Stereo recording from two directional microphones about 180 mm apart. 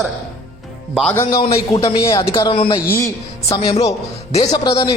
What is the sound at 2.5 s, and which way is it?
A man's voice, 30° left (ahead or behind).